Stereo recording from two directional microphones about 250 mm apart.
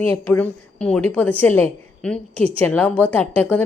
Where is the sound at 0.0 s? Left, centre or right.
Centre.